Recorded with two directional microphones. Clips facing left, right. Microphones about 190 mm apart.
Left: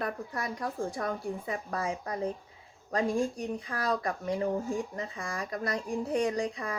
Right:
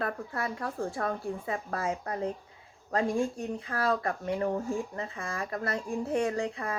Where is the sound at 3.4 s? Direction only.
20° left (ahead or behind).